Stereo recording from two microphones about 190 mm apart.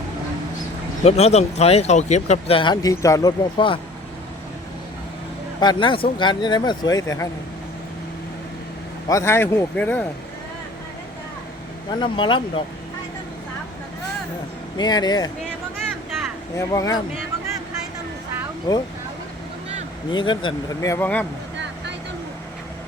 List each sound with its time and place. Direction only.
1.0 s speech: 35° left (ahead or behind)
5.5 s speech: 25° left (ahead or behind)
9.0 s speech: 15° left (ahead or behind)
11.9 s speech: 25° left (ahead or behind)
14.8 s speech: 20° left (ahead or behind)
16.6 s speech: 20° left (ahead or behind)
18.7 s speech: 25° left (ahead or behind)
20.1 s speech: 25° left (ahead or behind); by 21.2 s 10° left (ahead or behind)